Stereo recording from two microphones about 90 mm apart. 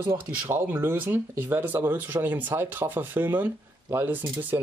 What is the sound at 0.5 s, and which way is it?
Speech, 25° right (ahead or behind).